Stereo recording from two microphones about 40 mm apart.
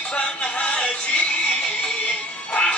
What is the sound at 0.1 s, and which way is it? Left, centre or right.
Music, left.